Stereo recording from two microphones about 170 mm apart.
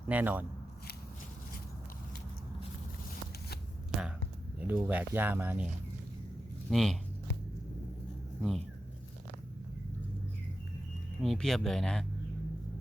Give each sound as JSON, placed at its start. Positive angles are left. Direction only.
{"t": 0.1, "sound": "speech", "side_deg": -10}
{"t": 4.6, "sound": "speech", "side_deg": -10}
{"t": 8.4, "sound": "speech", "side_deg": 0}
{"t": 11.2, "sound": "speech", "side_deg": 0}